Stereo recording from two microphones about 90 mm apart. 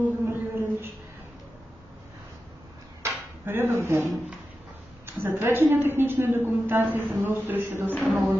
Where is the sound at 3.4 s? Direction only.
25° right (ahead or behind).